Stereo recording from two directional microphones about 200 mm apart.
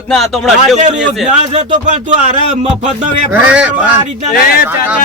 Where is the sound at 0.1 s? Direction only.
Centre (ahead or behind).